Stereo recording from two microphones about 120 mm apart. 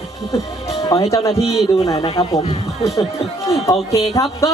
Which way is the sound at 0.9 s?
30° left (ahead or behind).